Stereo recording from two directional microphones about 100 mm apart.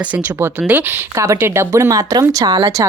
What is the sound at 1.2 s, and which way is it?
Speech, 25° right (ahead or behind).